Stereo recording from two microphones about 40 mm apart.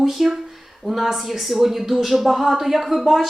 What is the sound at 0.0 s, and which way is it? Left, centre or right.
Speech, centre.